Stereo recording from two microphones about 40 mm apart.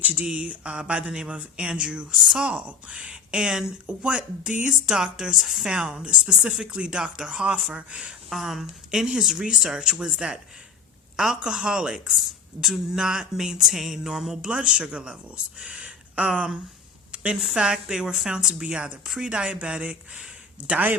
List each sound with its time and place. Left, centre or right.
0.0 s speech: right
8.3 s music: centre
9.7 s speech: right
11.4 s speech: right
12.6 s music: centre
14.4 s speech: right
17.4 s music: centre
18.3 s speech: centre
19.0 s speech: centre; by 20.2 s right